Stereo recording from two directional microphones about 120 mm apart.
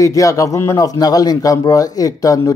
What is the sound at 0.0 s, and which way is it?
A man's voice, 25° left (ahead or behind).